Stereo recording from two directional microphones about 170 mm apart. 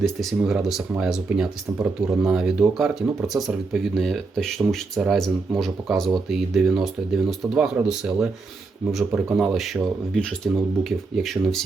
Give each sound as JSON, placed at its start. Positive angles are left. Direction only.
{"t": 0.0, "sound": "speech", "side_deg": 0}